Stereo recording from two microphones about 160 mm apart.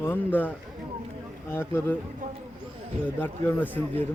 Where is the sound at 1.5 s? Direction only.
15° left (ahead or behind).